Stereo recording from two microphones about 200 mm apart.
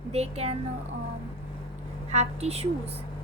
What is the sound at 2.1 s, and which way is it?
Speech, 35° right (ahead or behind).